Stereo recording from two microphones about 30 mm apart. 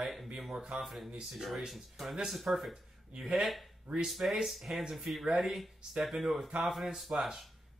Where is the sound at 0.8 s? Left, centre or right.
Centre.